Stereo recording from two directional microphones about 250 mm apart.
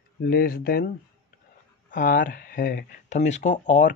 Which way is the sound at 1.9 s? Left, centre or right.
Left.